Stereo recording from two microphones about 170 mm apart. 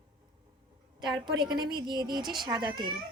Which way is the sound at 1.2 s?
25° right (ahead or behind).